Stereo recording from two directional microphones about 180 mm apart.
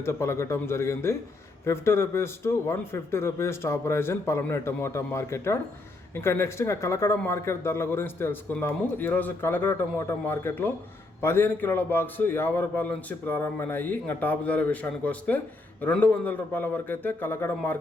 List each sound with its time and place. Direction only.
0.0 s speech: 15° left (ahead or behind)